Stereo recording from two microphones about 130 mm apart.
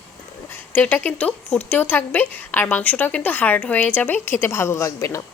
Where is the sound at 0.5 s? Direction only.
15° left (ahead or behind).